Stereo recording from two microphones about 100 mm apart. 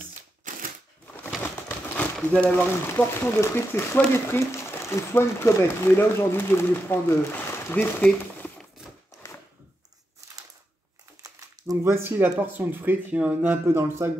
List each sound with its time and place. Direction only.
1.4 s a sound: 15° left (ahead or behind)
2.1 s speech: 5° left (ahead or behind)
3.0 s speech: 25° left (ahead or behind)
11.2 s crumpling: 35° right (ahead or behind)
11.8 s speech: 25° right (ahead or behind)